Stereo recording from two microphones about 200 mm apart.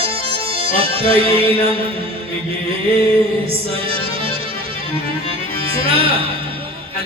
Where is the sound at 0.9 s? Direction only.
30° right (ahead or behind).